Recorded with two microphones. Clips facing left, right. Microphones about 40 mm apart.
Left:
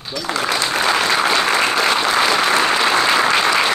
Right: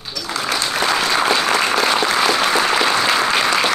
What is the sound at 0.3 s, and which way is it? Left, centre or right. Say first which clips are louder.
Applause: left 2 dB; left.